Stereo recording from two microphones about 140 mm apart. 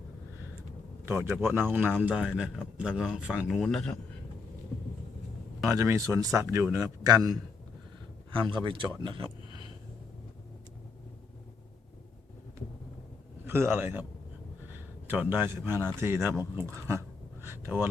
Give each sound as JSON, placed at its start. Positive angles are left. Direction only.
{"t": 1.0, "sound": "a man's voice", "side_deg": -15}
{"t": 5.6, "sound": "a man's voice", "side_deg": -20}
{"t": 13.4, "sound": "a man's voice", "side_deg": -15}
{"t": 15.0, "sound": "a man's voice", "side_deg": -15}
{"t": 16.4, "sound": "a sound", "side_deg": -20}